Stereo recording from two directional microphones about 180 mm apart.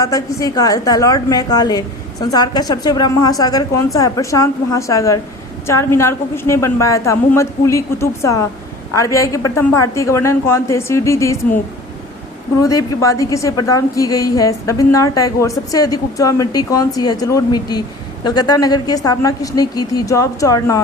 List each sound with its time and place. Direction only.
0.0 s a woman's voice: 20° left (ahead or behind)
12.6 s a woman's voice: 20° left (ahead or behind)